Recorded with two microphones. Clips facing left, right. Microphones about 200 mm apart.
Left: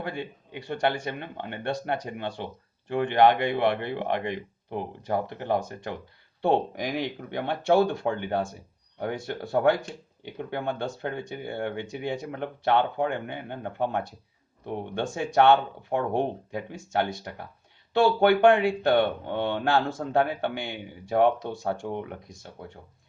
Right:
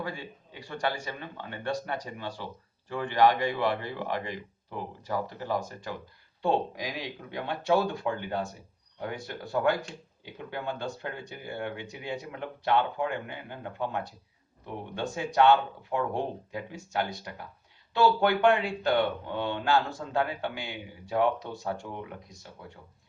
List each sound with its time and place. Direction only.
0.0 s speech: 60° left (ahead or behind)